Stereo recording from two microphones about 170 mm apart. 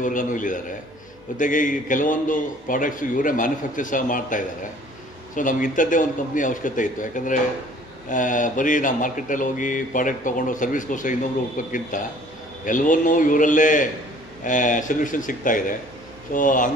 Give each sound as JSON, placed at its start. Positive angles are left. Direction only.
{"t": 0.0, "sound": "speech", "side_deg": 50}